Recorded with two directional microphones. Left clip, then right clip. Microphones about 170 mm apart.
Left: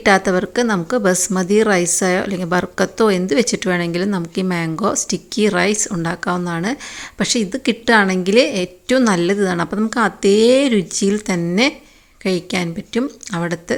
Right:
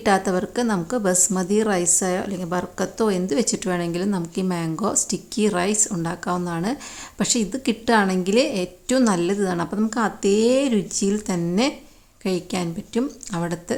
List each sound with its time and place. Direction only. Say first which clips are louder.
0.0 s a woman's voice: left 6 dB; 15° left (ahead or behind)